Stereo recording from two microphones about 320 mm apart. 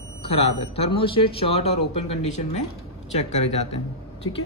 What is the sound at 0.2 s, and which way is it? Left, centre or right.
Speech, centre.